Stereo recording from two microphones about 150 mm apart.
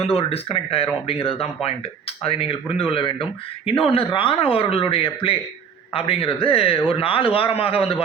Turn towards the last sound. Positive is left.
turn(degrees=40)  # may be behind; listen again after turning